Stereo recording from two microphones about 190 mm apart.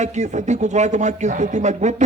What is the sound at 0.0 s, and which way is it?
Speech, 40° right (ahead or behind).